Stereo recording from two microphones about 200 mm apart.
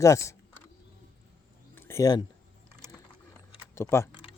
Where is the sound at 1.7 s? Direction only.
15° left (ahead or behind).